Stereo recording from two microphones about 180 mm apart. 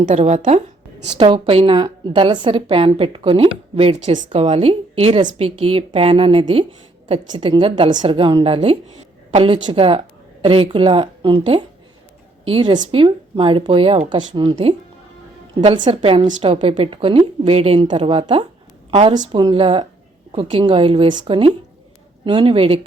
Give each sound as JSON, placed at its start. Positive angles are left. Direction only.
{"t": 0.0, "sound": "a woman's voice", "side_deg": -40}